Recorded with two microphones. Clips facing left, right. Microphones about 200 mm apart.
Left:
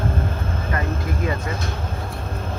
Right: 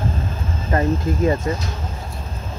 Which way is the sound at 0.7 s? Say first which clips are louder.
Right 8 dB; 30° right (ahead or behind).